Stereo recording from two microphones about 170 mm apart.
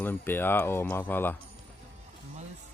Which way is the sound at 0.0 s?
10° left (ahead or behind).